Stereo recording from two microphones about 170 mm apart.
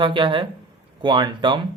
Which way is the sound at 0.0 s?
30° right (ahead or behind).